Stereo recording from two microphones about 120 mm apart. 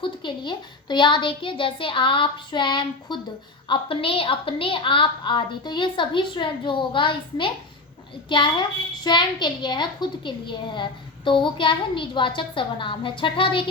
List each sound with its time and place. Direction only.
0.0 s a woman's voice: 40° left (ahead or behind)